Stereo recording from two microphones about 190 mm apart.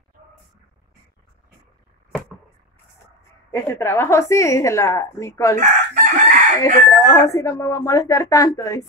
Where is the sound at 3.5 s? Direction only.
15° left (ahead or behind).